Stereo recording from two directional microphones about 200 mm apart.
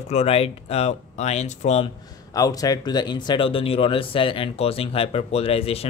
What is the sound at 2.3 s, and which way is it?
Speech, 20° left (ahead or behind).